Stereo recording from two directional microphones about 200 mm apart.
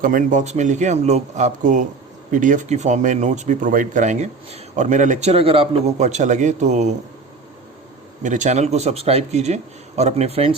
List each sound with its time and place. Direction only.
0.0 s speech: 40° right (ahead or behind)
8.2 s speech: 40° right (ahead or behind)